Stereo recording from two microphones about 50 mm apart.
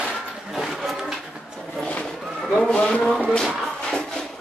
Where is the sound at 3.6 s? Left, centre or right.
Centre.